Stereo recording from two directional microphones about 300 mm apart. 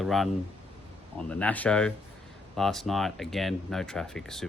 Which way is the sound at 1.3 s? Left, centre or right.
Centre.